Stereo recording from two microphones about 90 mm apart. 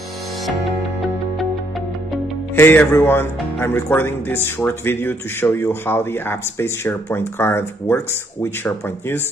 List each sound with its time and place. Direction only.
2.5 s speech: 25° left (ahead or behind)